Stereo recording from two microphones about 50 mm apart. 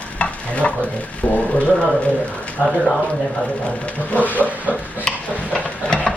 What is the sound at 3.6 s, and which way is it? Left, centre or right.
Speech, left.